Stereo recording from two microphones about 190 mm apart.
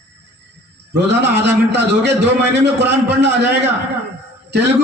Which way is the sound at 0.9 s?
65° right (ahead or behind).